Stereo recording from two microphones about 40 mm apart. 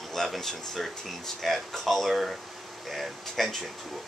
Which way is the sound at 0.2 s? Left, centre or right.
Centre.